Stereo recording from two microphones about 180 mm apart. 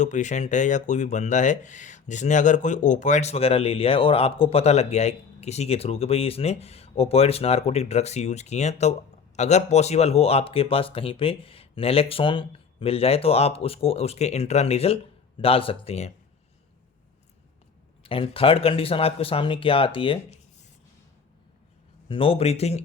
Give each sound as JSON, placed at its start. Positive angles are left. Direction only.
{"t": 0.0, "sound": "speech", "side_deg": 40}
{"t": 18.0, "sound": "speech", "side_deg": 30}
{"t": 22.1, "sound": "speech", "side_deg": 30}